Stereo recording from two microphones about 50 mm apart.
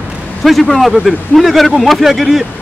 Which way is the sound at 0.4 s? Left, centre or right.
Centre.